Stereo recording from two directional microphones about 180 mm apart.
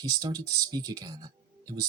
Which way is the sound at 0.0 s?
20° right (ahead or behind).